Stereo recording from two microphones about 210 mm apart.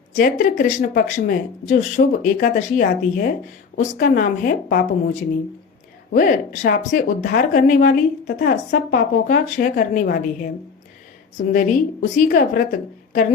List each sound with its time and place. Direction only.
0.2 s a woman's voice: 40° left (ahead or behind)